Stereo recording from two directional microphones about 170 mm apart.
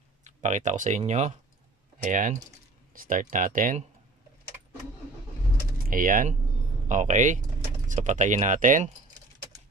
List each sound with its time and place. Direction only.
0.2 s speech: 45° right (ahead or behind)
5.9 s speech: 55° right (ahead or behind)